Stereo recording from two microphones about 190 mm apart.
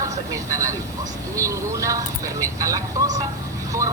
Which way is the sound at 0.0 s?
15° right (ahead or behind).